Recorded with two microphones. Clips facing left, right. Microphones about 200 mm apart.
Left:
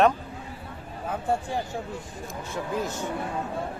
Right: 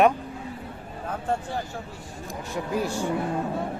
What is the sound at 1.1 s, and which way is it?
Speech, 10° left (ahead or behind).